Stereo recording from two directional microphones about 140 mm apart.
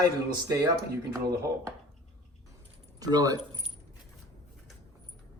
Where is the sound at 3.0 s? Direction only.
25° right (ahead or behind).